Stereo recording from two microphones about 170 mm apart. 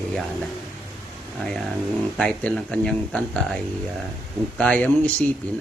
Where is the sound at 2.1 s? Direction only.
5° left (ahead or behind).